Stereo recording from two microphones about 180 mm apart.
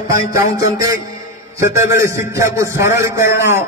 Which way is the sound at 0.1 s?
15° right (ahead or behind).